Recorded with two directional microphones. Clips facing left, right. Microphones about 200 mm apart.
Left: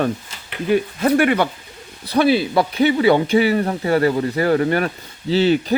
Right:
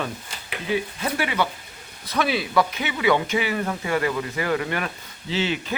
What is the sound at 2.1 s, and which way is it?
Speech, 30° left (ahead or behind).